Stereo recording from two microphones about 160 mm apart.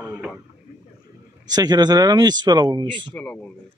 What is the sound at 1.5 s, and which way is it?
Speech, 25° right (ahead or behind).